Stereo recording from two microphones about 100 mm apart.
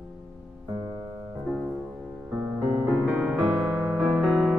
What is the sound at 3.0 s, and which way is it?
Music, 20° right (ahead or behind).